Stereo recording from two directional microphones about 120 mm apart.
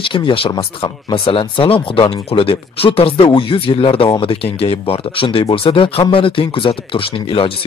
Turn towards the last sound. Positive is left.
turn(degrees=50)  # may be behind; listen again after turning